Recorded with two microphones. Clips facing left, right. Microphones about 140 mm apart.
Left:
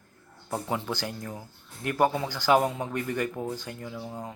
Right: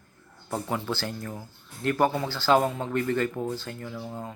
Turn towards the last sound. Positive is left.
turn(degrees=10)  # may be behind; listen again after turning